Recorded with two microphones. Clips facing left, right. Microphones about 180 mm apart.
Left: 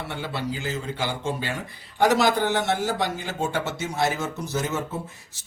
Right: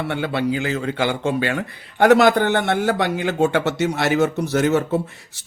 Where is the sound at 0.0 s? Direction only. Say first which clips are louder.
Right 8 dB; 60° right (ahead or behind).